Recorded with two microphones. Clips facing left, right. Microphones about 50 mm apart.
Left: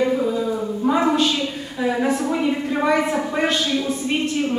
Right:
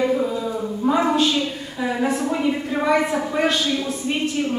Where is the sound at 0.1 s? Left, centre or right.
Centre.